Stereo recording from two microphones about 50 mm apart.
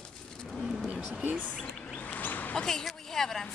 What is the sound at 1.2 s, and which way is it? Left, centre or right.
Speech, right.